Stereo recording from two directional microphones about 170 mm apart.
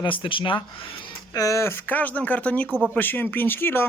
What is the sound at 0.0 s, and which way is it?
Speech, 30° left (ahead or behind).